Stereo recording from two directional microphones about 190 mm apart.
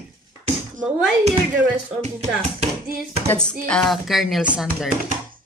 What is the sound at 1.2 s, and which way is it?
Speech, 35° right (ahead or behind).